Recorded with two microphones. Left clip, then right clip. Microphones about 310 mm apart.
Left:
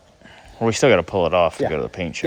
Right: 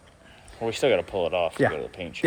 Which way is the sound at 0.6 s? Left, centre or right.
Left.